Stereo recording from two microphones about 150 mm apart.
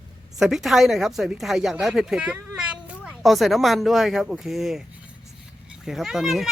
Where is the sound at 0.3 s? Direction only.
Centre (ahead or behind).